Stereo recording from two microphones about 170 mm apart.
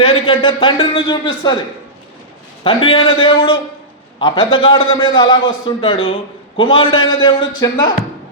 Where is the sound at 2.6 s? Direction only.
30° left (ahead or behind).